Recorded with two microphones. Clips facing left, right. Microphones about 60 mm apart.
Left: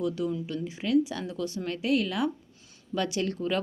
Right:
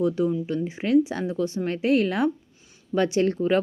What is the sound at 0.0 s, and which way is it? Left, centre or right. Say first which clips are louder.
Speech: right 6 dB; right.